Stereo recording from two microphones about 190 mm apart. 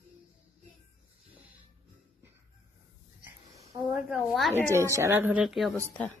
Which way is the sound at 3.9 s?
Centre (ahead or behind).